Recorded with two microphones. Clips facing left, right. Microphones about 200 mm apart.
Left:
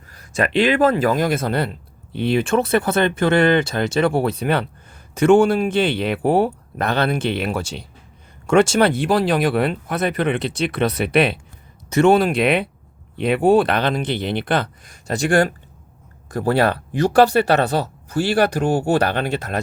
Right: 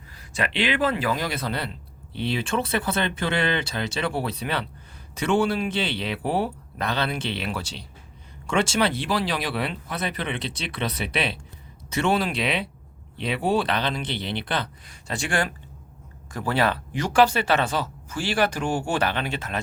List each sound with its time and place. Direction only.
0.1 s speech: 45° left (ahead or behind)
18.1 s speech: 60° left (ahead or behind)
18.6 s speech: 40° left (ahead or behind)